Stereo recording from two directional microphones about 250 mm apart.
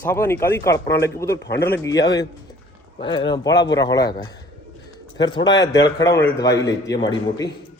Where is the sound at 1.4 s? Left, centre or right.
Left.